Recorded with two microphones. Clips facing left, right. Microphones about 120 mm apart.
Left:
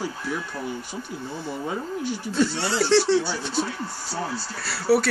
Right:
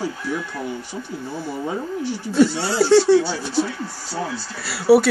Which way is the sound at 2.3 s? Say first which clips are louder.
Right 7 dB; 10° right (ahead or behind).